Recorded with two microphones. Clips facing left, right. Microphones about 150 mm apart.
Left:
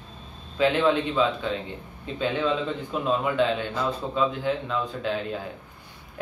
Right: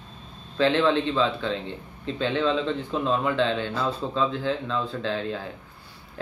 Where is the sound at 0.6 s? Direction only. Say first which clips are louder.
Even; 15° left (ahead or behind).